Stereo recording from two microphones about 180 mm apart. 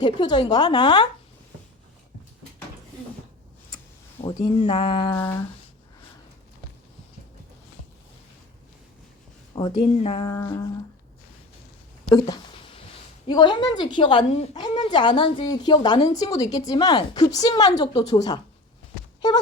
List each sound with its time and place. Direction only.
0.0 s a woman's voice: 25° left (ahead or behind)
4.2 s a woman's voice: 30° left (ahead or behind)
9.6 s a woman's voice: 30° left (ahead or behind)
13.2 s a woman's voice: 25° left (ahead or behind)